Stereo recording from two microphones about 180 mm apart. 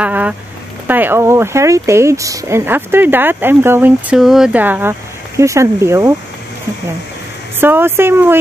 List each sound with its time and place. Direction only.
0.0 s a sound: 10° right (ahead or behind)
0.8 s speech: 10° right (ahead or behind)
7.6 s speech: 10° right (ahead or behind)